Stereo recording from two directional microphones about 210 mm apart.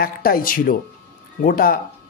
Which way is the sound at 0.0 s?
45° left (ahead or behind).